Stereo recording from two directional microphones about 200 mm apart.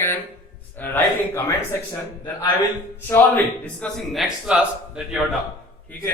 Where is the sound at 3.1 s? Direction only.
5° left (ahead or behind).